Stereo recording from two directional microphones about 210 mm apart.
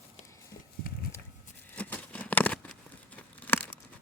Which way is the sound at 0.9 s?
45° left (ahead or behind).